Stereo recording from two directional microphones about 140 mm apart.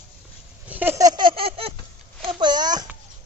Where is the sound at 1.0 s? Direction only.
30° right (ahead or behind).